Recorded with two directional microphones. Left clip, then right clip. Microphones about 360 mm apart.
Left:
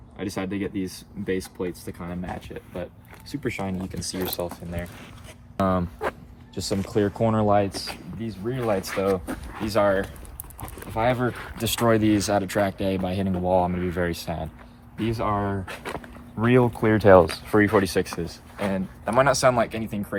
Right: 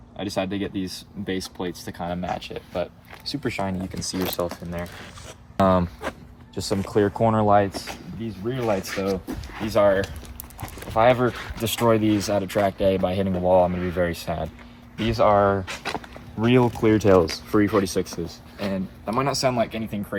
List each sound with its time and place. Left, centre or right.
0.2 s speech: centre
2.5 s speech: right
6.0 s speech: centre; by 19.3 s left
19.5 s speech: centre